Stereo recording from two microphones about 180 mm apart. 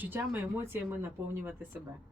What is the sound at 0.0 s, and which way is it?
Speech, 10° right (ahead or behind).